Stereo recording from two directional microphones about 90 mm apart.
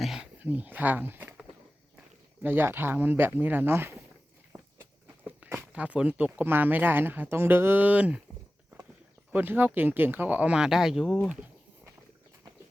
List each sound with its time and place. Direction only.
0.0 s a sound: 5° right (ahead or behind)
0.3 s speech: 20° right (ahead or behind)
2.4 s speech: 25° right (ahead or behind)
5.2 s speech: 20° right (ahead or behind)
9.3 s speech: 20° right (ahead or behind); by 11.2 s 5° right (ahead or behind)